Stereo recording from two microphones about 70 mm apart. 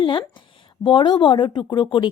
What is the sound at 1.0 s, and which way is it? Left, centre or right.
Speech, left.